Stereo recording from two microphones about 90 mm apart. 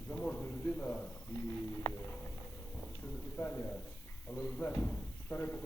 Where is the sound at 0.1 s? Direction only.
15° left (ahead or behind).